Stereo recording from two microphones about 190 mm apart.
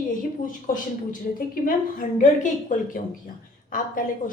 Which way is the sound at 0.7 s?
45° left (ahead or behind).